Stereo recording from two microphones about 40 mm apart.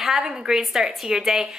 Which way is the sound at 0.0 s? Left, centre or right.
Centre.